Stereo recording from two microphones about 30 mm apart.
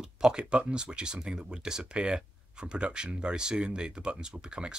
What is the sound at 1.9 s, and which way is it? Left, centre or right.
Speech, right.